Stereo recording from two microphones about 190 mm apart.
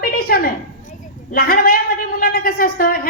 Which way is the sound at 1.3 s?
50° left (ahead or behind).